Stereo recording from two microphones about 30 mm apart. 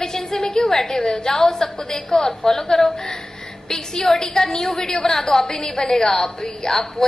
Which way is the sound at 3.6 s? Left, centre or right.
Left.